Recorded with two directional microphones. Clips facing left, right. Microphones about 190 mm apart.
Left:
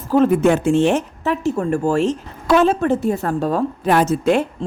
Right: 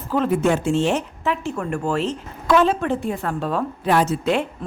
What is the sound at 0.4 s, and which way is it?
Speech, 60° left (ahead or behind).